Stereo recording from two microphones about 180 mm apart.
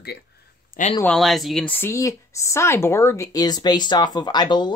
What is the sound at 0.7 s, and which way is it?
Speech, 40° left (ahead or behind).